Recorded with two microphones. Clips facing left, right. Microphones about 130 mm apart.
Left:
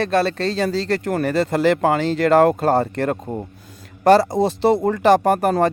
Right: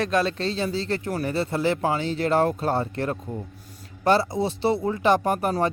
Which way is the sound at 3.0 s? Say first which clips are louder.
Left 6 dB; 75° left (ahead or behind).